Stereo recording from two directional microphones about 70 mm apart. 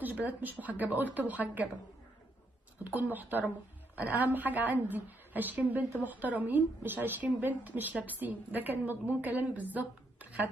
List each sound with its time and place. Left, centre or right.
0.4 s a woman's voice: right
2.8 s a woman's voice: right